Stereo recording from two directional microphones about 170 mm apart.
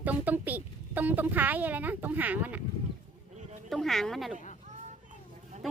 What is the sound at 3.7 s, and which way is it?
Speech, centre (ahead or behind).